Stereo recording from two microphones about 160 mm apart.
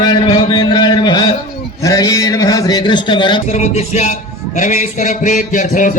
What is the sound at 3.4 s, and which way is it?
A man's voice, 45° left (ahead or behind).